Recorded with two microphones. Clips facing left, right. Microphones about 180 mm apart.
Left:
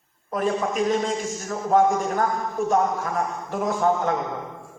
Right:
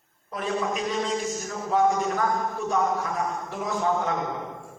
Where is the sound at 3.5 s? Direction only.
45° left (ahead or behind).